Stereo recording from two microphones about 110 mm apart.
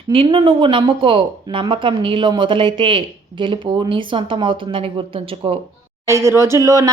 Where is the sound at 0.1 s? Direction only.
55° right (ahead or behind).